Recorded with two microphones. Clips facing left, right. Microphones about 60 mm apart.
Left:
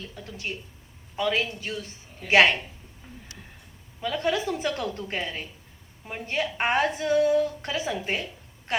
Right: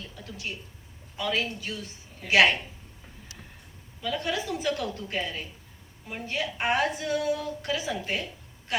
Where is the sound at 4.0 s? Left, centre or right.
Left.